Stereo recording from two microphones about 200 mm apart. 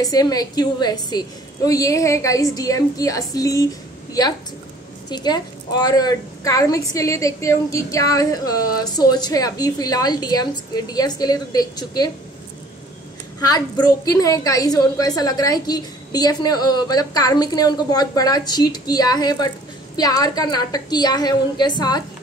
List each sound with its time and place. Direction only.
0.0 s a woman's voice: 20° left (ahead or behind)
14.0 s a woman's voice: 15° left (ahead or behind)